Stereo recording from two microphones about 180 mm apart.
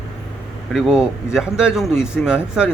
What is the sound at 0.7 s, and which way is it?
Speech, 5° right (ahead or behind).